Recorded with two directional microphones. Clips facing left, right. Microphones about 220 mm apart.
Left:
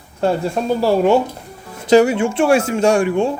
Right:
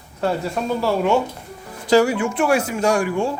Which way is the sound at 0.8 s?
35° left (ahead or behind).